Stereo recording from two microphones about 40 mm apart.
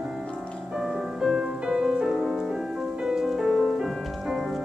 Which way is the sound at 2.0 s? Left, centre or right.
Centre.